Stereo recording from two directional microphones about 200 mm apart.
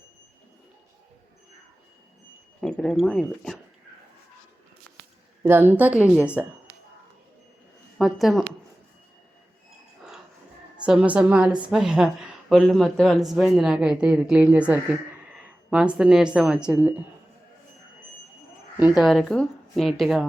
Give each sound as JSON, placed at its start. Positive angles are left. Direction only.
{"t": 2.6, "sound": "a woman's voice", "side_deg": 5}
{"t": 5.4, "sound": "a woman's voice", "side_deg": -10}
{"t": 7.9, "sound": "a woman's voice", "side_deg": 0}
{"t": 10.8, "sound": "a woman's voice", "side_deg": -5}
{"t": 18.8, "sound": "a woman's voice", "side_deg": -5}